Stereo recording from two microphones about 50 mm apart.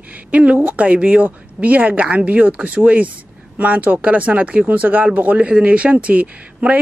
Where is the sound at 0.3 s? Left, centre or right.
Right.